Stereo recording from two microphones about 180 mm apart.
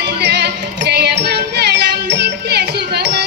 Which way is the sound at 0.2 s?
70° right (ahead or behind).